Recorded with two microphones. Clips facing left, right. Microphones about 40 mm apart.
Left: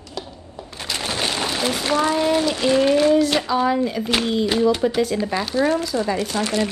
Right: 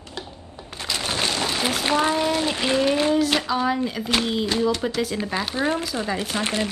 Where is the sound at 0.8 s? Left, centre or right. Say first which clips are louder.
Left 1 dB; centre.